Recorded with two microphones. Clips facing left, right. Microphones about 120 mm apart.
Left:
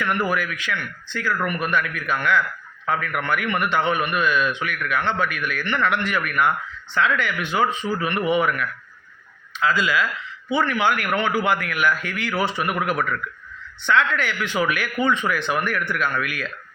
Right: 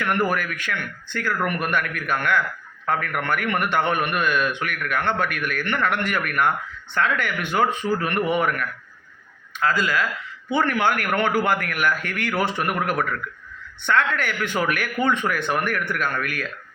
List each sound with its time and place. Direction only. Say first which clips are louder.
0.3 s a man's voice: left 1 dB; 50° right (ahead or behind)